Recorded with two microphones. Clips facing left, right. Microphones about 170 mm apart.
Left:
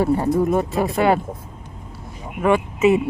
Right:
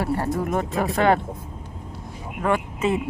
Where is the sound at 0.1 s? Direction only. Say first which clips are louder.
Left 6 dB; 20° left (ahead or behind).